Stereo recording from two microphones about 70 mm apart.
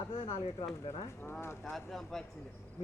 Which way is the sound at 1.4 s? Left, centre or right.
Left.